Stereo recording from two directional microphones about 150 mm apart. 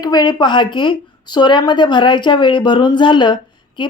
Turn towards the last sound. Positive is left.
turn(degrees=30)  # may be behind; listen again after turning